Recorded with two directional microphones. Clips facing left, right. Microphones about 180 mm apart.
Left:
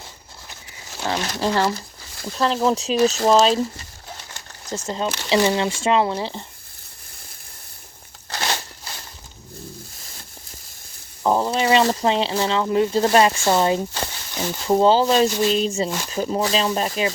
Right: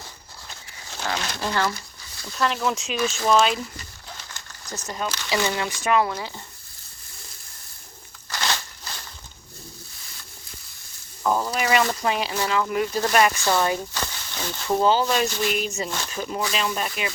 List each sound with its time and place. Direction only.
1.0 s speech: 30° left (ahead or behind)
8.3 s crunch: 30° left (ahead or behind)
11.2 s speech: 30° left (ahead or behind)